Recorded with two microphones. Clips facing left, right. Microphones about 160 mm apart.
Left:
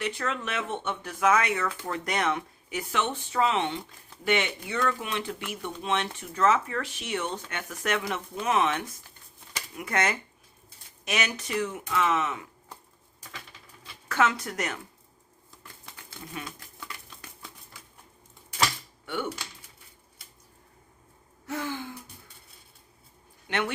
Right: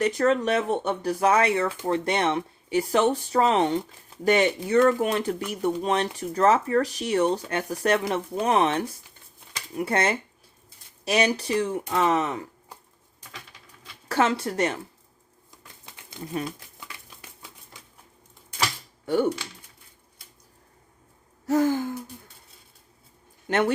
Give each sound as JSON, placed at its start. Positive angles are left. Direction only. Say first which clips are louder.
{"t": 0.0, "sound": "speech", "louder": "right 10 dB", "side_deg": -40}
{"t": 14.1, "sound": "speech", "louder": "right 3 dB", "side_deg": -30}
{"t": 15.6, "sound": "typewriter", "louder": "left 1 dB", "side_deg": -20}
{"t": 19.0, "sound": "speech", "louder": "right 10 dB", "side_deg": -40}
{"t": 21.4, "sound": "speech", "louder": "right 11 dB", "side_deg": -40}
{"t": 23.5, "sound": "speech", "louder": "right 7 dB", "side_deg": -45}